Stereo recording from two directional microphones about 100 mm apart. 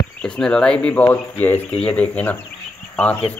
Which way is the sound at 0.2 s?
10° left (ahead or behind).